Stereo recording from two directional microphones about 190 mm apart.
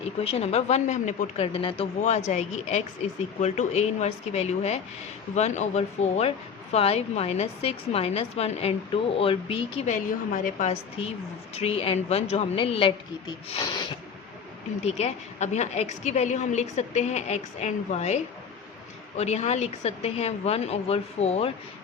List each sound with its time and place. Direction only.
0.0 s speech: 35° left (ahead or behind)
9.9 s speech: 40° left (ahead or behind); by 13.8 s 20° left (ahead or behind)
14.8 s speech: 35° left (ahead or behind)